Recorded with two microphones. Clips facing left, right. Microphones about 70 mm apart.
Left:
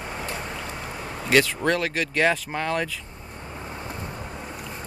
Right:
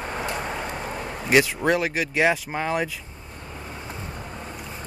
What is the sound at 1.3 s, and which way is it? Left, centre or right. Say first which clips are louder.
Speech: right 1 dB; centre.